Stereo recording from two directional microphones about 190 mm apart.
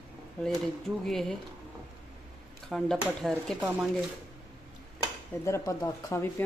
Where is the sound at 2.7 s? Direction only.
Centre (ahead or behind).